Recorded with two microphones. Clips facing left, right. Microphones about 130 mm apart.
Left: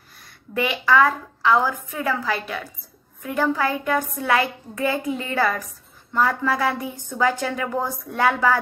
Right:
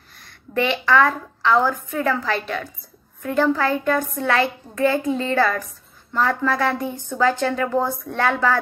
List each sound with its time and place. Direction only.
0.6 s a woman's voice: 10° left (ahead or behind)
5.0 s a woman's voice: 35° right (ahead or behind)
5.3 s a woman's voice: 15° left (ahead or behind)